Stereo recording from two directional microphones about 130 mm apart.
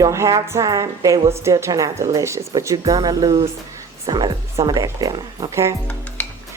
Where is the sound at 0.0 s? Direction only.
25° right (ahead or behind).